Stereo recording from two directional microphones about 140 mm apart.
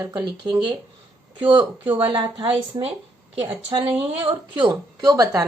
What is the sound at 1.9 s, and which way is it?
Speech, 35° right (ahead or behind).